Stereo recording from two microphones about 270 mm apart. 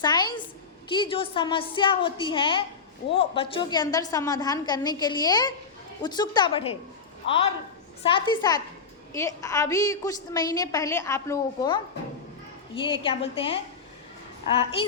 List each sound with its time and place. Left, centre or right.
0.0 s a woman's voice: centre
8.0 s a woman's voice: centre
14.6 s a woman's voice: centre